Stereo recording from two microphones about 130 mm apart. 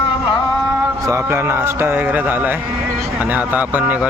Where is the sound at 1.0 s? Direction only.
20° right (ahead or behind).